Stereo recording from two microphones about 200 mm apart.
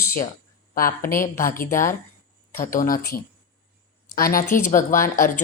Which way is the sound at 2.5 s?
40° left (ahead or behind).